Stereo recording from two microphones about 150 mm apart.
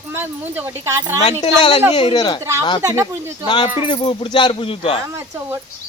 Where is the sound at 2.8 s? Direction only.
20° right (ahead or behind).